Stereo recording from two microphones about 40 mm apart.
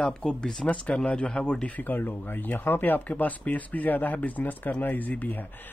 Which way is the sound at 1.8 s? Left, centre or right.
Left.